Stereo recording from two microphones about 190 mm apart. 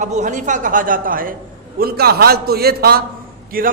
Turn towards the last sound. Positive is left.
turn(degrees=-50)  # may be behind; listen again after turning